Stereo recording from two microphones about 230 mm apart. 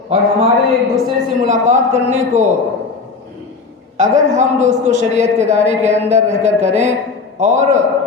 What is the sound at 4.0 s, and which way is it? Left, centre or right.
A man's voice, right.